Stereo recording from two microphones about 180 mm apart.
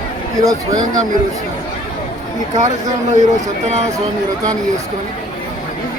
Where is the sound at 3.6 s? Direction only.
40° right (ahead or behind).